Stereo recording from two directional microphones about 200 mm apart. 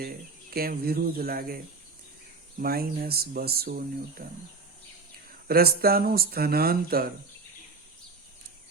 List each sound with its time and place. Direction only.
0.5 s speech: 50° right (ahead or behind)
5.5 s speech: 50° right (ahead or behind)